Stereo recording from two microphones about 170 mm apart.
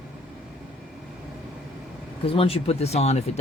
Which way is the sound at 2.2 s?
35° left (ahead or behind).